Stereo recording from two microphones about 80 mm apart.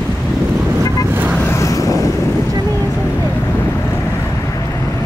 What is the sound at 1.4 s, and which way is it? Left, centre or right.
Vehicle, left.